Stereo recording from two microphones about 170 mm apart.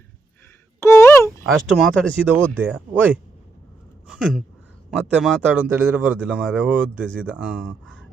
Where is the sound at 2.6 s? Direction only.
10° right (ahead or behind).